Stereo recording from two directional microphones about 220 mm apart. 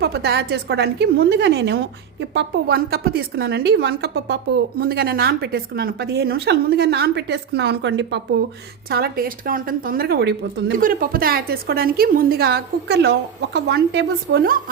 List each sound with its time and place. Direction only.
0.0 s a woman's voice: 45° right (ahead or behind)
8.9 s a woman's voice: 45° right (ahead or behind)